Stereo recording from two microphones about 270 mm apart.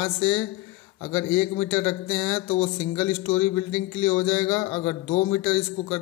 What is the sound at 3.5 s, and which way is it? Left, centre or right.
Speech, centre.